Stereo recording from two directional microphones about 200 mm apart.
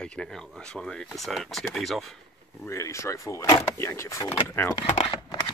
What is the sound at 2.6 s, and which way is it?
Speech, 15° left (ahead or behind).